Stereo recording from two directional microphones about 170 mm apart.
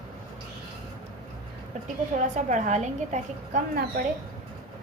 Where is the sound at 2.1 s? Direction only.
45° right (ahead or behind).